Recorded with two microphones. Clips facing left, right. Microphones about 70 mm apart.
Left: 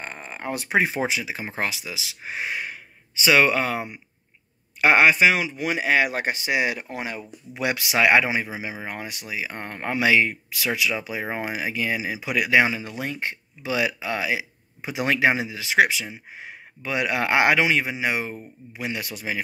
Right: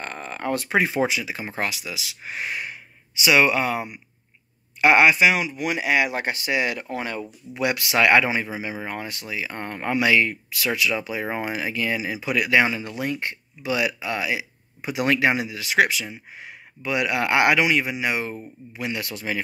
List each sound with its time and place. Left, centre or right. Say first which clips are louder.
0.0 s speech: right 3 dB; centre